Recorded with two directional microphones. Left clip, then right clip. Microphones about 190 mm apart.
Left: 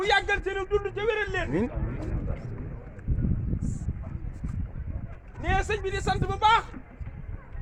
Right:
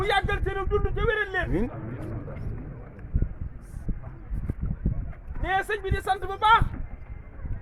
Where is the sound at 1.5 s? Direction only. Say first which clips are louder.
Left 1 dB; 35° left (ahead or behind).